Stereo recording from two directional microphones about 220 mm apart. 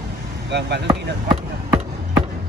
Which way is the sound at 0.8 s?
15° right (ahead or behind).